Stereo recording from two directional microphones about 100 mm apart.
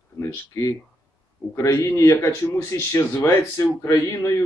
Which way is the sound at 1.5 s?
25° left (ahead or behind).